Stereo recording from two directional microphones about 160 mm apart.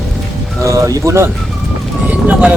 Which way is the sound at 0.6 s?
20° right (ahead or behind).